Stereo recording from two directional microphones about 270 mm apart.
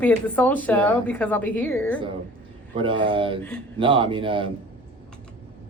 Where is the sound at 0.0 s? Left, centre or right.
Centre.